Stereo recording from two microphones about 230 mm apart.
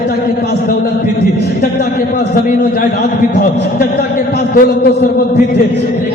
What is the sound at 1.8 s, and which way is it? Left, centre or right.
A man's voice, left.